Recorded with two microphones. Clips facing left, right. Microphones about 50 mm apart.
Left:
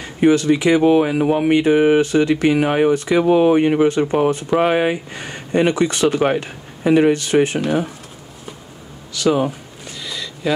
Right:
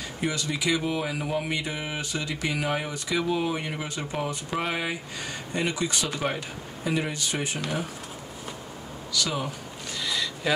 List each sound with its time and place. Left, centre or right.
0.0 s speech: left
9.1 s speech: left
9.9 s a sound: centre